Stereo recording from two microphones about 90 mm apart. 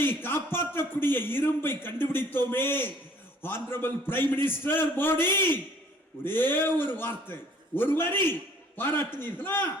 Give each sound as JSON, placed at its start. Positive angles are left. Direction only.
{"t": 0.0, "sound": "a man's voice", "side_deg": 25}